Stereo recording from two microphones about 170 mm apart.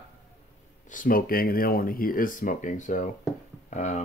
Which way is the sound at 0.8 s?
55° left (ahead or behind).